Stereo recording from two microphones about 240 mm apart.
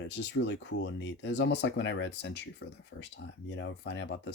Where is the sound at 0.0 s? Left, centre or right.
Left.